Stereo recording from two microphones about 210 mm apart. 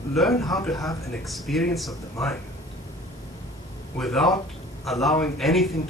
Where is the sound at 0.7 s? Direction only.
15° left (ahead or behind).